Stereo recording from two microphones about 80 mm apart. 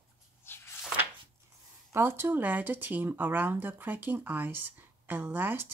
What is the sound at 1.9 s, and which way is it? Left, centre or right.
Speech, right.